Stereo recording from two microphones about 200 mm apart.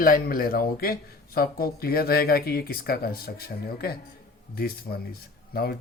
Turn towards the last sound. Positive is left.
turn(degrees=50)  # may be behind; listen again after turning